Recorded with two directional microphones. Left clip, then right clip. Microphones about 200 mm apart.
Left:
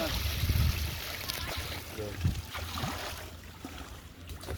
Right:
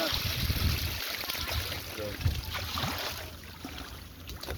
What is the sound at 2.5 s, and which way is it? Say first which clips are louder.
Boat: right 4 dB; 5° left (ahead or behind).